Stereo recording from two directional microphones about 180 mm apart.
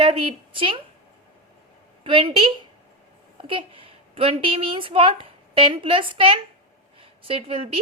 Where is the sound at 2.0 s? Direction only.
30° right (ahead or behind).